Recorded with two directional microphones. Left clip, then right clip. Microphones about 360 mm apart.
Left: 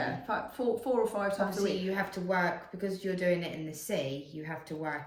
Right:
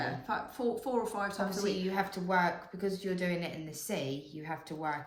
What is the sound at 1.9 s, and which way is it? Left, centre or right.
Speech, centre.